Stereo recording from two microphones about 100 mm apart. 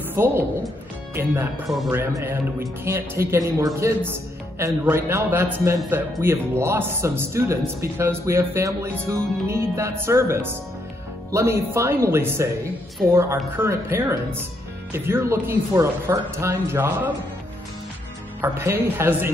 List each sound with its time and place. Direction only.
0.1 s speech: 25° right (ahead or behind)
18.4 s speech: 25° right (ahead or behind)